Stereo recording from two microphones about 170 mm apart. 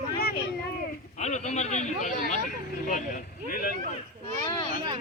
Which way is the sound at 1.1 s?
45° left (ahead or behind).